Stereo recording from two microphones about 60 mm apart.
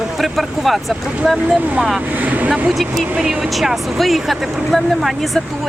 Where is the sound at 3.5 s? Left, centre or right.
Centre.